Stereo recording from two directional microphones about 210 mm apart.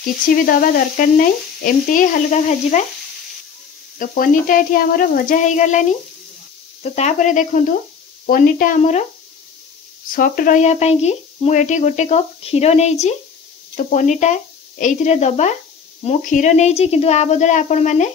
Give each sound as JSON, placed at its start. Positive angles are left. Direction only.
{"t": 0.5, "sound": "speech", "side_deg": 40}
{"t": 4.0, "sound": "speech", "side_deg": 40}
{"t": 10.1, "sound": "speech", "side_deg": 40}